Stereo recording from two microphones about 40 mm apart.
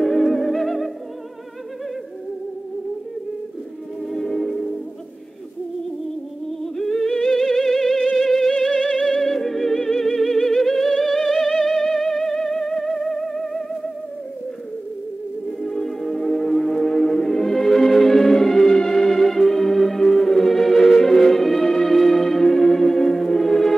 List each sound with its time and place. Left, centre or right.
0.0 s music: centre
4.1 s music: centre
6.6 s music: centre
8.8 s music: centre
15.6 s music: centre